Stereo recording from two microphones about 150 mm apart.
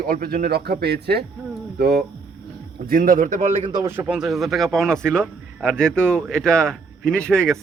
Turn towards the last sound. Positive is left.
turn(degrees=5)  # may be behind; listen again after turning